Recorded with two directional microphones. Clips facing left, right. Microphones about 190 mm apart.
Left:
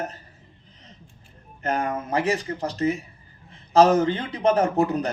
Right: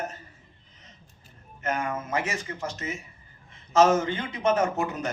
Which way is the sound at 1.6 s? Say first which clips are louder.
Left 4 dB; 35° left (ahead or behind).